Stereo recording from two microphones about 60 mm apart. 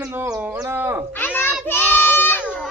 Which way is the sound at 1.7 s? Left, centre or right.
Left.